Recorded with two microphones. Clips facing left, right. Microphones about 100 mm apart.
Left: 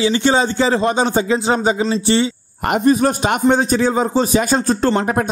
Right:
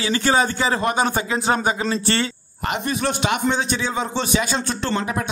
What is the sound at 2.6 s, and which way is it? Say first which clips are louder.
Speech: left 9 dB; 45° left (ahead or behind).